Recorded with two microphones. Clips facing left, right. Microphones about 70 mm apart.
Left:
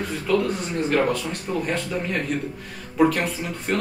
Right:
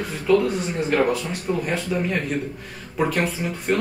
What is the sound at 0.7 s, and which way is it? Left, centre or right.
Speech, centre.